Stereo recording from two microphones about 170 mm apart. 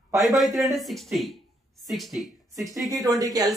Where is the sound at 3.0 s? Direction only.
20° right (ahead or behind).